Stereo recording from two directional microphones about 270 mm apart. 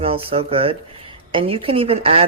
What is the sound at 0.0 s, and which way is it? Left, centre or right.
Speech, right.